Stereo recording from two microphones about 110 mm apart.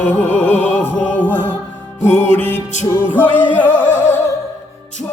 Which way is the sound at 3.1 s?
15° left (ahead or behind).